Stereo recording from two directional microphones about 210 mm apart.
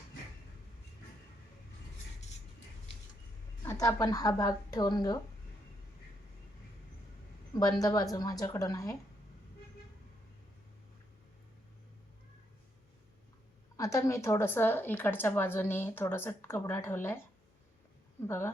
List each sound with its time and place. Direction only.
3.6 s a woman's voice: 15° left (ahead or behind)
7.8 s a woman's voice: 15° left (ahead or behind)
13.7 s a woman's voice: 15° left (ahead or behind)
18.2 s a woman's voice: 10° left (ahead or behind)